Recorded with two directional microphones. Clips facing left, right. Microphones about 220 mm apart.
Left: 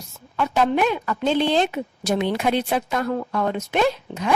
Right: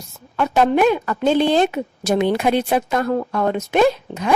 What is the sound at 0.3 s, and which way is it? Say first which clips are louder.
A woman's voice: right 4 dB; 50° right (ahead or behind).